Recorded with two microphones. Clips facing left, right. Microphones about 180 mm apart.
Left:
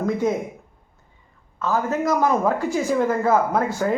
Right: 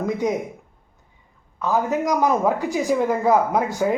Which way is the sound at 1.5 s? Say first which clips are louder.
Right 1 dB; 15° right (ahead or behind).